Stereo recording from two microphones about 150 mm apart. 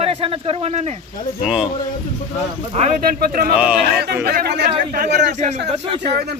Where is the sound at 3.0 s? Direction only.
75° right (ahead or behind).